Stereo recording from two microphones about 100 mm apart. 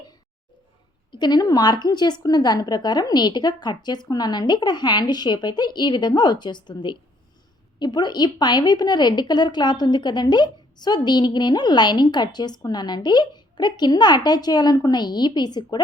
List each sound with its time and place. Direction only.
1.1 s a woman's voice: 45° left (ahead or behind)